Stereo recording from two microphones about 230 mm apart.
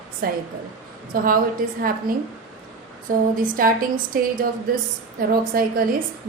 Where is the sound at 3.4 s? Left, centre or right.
Right.